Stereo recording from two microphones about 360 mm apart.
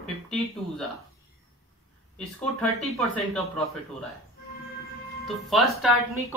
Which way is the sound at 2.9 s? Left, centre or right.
Centre.